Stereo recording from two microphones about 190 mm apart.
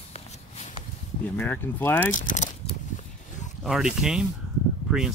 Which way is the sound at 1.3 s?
10° left (ahead or behind).